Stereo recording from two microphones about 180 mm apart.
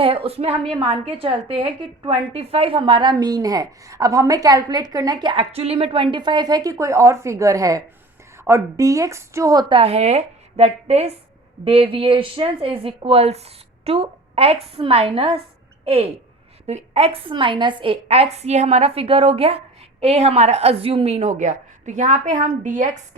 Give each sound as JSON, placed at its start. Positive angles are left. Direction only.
{"t": 0.0, "sound": "a woman's voice", "side_deg": -30}